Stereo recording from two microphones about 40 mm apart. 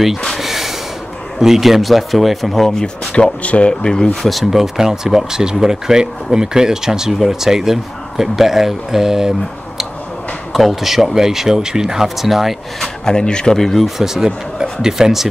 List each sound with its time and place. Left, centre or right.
0.4 s snort: centre
1.4 s speech: centre
3.1 s speech: left
3.8 s speech: centre
4.4 s speech: centre
10.5 s speech: centre
12.8 s speech: centre
13.6 s speech: centre
13.8 s speech: centre